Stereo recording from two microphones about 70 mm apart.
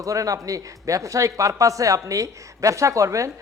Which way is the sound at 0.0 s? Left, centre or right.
Right.